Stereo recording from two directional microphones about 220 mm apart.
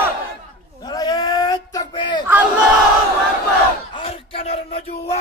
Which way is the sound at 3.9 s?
25° left (ahead or behind).